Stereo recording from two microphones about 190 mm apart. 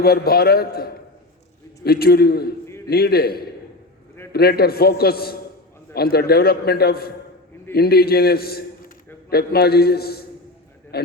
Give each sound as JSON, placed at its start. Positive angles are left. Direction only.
{"t": 0.0, "sound": "a man's voice", "side_deg": 55}
{"t": 2.6, "sound": "a sound", "side_deg": 15}
{"t": 2.9, "sound": "a man's voice", "side_deg": 55}